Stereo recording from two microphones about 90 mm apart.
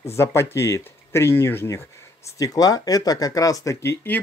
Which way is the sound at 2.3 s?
40° left (ahead or behind).